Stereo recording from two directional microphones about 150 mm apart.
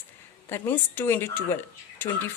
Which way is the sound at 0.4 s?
15° left (ahead or behind).